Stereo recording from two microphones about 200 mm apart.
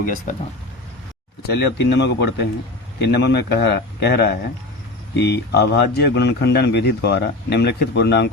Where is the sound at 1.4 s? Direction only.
55° left (ahead or behind).